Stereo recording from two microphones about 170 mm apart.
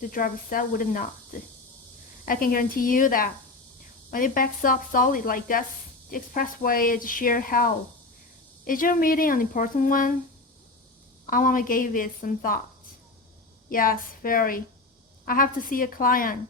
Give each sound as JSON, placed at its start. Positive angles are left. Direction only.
{"t": 0.0, "sound": "speech", "side_deg": 55}
{"t": 11.3, "sound": "speech", "side_deg": 55}
{"t": 13.7, "sound": "speech", "side_deg": 55}